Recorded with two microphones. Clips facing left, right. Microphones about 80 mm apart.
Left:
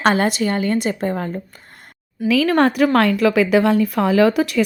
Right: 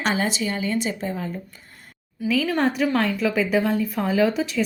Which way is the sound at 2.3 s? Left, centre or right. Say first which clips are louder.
Left 6 dB; left.